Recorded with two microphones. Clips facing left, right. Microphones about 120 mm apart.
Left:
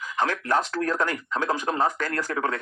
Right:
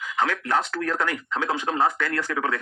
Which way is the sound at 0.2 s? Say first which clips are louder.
Even; 40° left (ahead or behind).